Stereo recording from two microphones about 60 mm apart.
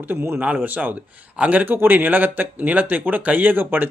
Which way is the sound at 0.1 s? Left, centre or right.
Right.